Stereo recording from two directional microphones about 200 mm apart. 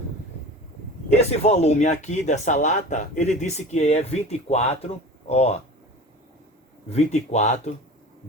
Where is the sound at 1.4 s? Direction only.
30° left (ahead or behind).